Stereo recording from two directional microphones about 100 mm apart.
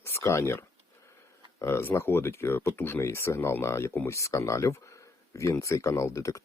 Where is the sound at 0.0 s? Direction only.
25° left (ahead or behind).